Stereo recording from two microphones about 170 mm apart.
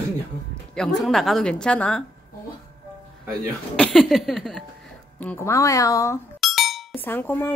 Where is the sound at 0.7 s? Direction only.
Centre (ahead or behind).